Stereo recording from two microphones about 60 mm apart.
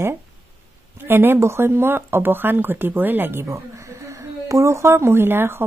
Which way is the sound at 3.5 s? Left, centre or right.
Right.